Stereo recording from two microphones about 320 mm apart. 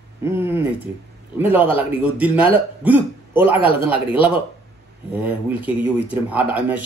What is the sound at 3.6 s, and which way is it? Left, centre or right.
Speech, centre.